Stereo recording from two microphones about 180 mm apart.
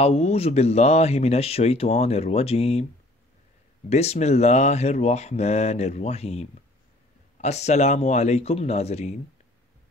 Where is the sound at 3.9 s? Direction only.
35° left (ahead or behind).